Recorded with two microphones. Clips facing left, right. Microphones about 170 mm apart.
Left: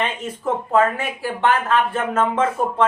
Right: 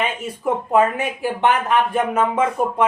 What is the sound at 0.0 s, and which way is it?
Speech, 10° right (ahead or behind).